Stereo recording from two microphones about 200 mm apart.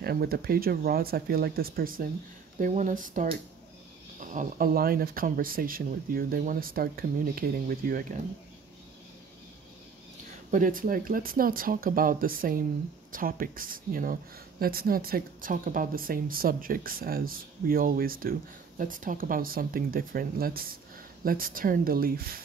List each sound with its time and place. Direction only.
0.0 s speech: 50° right (ahead or behind)
10.5 s speech: 45° right (ahead or behind)